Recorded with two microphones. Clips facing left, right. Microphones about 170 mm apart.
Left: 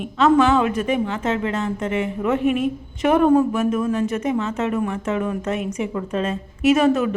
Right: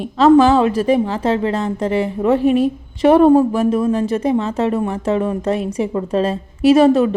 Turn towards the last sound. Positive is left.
turn(degrees=-30)  # may be behind; listen again after turning